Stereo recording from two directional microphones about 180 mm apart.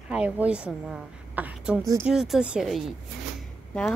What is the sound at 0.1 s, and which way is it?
A woman's voice, 5° right (ahead or behind).